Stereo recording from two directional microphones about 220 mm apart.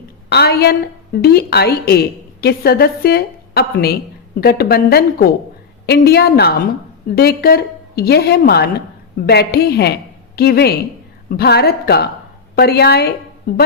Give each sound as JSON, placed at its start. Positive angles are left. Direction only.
{"t": 0.3, "sound": "a woman's voice", "side_deg": 45}